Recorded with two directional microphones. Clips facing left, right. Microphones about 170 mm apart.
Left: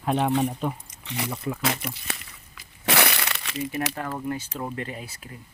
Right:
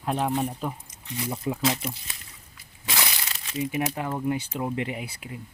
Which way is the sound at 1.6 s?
65° left (ahead or behind).